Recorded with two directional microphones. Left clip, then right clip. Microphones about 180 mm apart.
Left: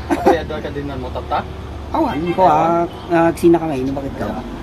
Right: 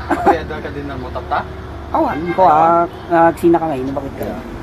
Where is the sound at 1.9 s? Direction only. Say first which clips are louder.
Right 2 dB; 35° left (ahead or behind).